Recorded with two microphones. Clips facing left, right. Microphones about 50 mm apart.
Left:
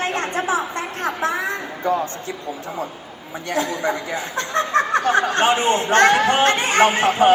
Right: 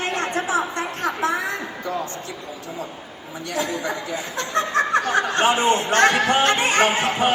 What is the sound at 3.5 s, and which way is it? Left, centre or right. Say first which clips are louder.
Speech: left 3 dB; left.